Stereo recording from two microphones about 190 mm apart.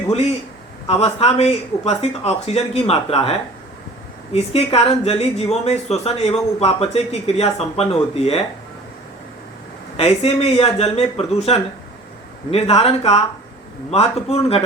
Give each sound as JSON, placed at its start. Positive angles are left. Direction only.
{"t": 0.9, "sound": "speech", "side_deg": 30}
{"t": 10.0, "sound": "speech", "side_deg": 30}